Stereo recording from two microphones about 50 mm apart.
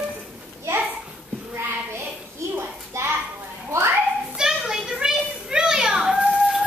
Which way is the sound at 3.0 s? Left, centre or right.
Right.